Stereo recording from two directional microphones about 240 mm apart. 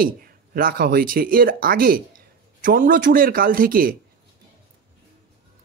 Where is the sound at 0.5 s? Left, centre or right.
Right.